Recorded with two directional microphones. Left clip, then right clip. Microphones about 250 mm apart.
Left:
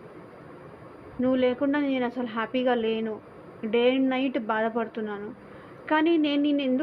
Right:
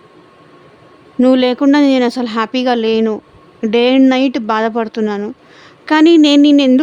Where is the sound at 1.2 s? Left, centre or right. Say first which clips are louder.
Right 13 dB; right.